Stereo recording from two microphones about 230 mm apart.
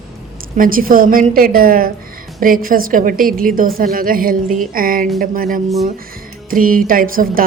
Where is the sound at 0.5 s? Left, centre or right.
Right.